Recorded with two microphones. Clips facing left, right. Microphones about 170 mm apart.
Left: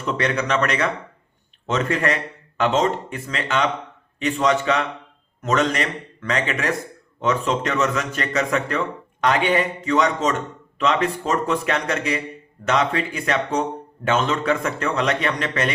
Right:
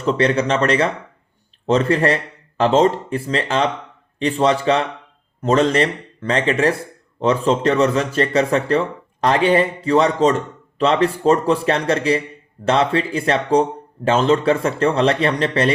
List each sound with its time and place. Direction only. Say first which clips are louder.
0.0 s speech: right 6 dB; 30° right (ahead or behind)